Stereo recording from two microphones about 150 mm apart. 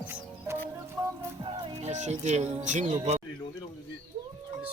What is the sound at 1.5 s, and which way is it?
Music, 35° right (ahead or behind).